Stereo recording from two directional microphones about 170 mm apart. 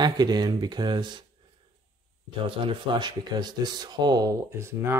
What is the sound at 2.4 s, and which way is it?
Speech, 30° right (ahead or behind).